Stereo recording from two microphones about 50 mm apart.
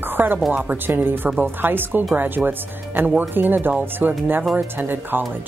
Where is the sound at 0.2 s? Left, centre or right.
Right.